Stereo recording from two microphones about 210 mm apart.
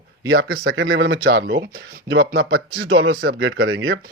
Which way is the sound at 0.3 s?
65° right (ahead or behind).